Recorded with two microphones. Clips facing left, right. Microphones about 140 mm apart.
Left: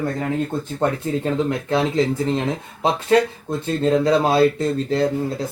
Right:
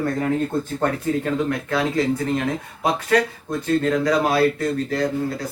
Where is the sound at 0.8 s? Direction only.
20° left (ahead or behind).